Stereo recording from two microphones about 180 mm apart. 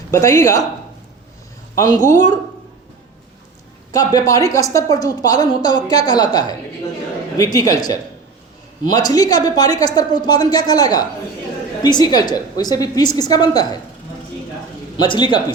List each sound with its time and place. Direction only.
0.1 s speech: 15° left (ahead or behind)
1.7 s speech: 15° left (ahead or behind)
3.9 s a woman's voice: 20° left (ahead or behind)
15.0 s a woman's voice: 25° left (ahead or behind)